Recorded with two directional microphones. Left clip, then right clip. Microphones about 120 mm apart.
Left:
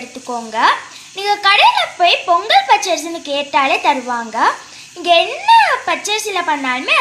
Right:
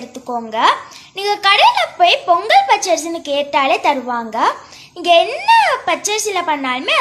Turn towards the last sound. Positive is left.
turn(degrees=-15)  # may be behind; listen again after turning